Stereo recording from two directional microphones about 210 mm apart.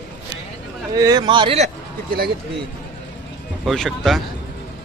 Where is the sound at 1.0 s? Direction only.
20° right (ahead or behind); by 2.3 s 45° right (ahead or behind).